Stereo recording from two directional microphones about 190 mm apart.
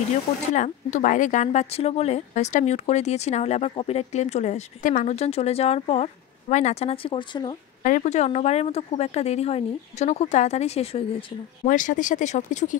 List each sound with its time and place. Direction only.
0.6 s speech: 40° left (ahead or behind)
7.8 s speech: 40° left (ahead or behind)
11.6 s speech: 45° left (ahead or behind)